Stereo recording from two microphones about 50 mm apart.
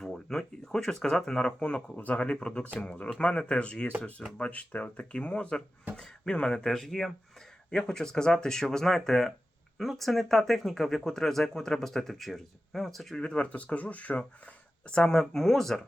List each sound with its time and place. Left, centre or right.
0.3 s speech: centre
13.1 s speech: centre